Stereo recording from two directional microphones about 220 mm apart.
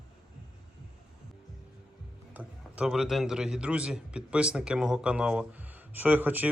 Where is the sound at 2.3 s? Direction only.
5° right (ahead or behind).